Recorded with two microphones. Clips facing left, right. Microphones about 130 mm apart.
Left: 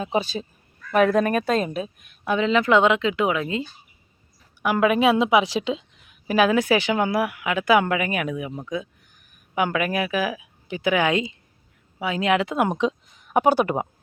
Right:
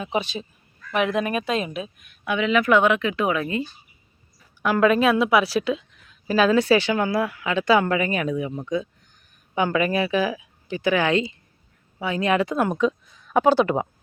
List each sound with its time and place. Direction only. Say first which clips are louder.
0.0 s a woman's voice: left 2 dB; 35° left (ahead or behind); by 3.6 s 20° left (ahead or behind)
4.6 s a woman's voice: right 1 dB; 10° left (ahead or behind)